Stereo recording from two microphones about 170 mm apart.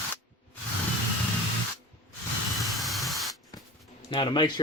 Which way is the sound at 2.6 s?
Centre (ahead or behind).